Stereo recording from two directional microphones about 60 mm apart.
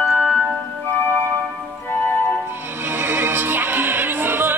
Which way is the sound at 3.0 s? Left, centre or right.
Right.